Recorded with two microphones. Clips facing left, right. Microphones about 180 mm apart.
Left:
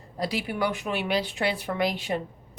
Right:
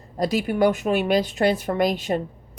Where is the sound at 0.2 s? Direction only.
45° right (ahead or behind).